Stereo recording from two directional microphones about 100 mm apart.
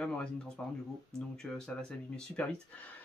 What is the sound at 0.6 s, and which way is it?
Speech, 10° left (ahead or behind).